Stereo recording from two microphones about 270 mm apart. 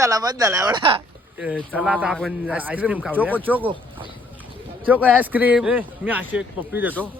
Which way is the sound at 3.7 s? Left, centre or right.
Centre.